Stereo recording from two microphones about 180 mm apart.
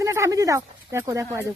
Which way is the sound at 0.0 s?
15° right (ahead or behind).